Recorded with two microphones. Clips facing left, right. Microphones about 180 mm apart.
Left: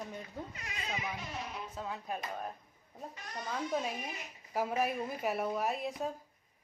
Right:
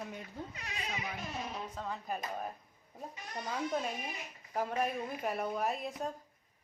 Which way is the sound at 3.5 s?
Centre (ahead or behind).